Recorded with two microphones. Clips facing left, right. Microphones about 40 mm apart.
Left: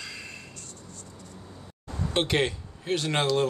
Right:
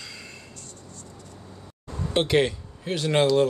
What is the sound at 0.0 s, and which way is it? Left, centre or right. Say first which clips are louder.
Music: left 2 dB; centre.